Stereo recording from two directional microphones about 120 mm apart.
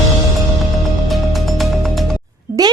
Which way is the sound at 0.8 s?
Centre (ahead or behind).